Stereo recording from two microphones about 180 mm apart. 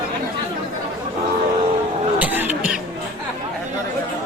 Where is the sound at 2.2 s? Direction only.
10° right (ahead or behind).